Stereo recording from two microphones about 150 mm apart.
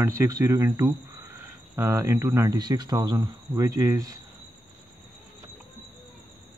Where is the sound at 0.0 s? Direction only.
25° right (ahead or behind).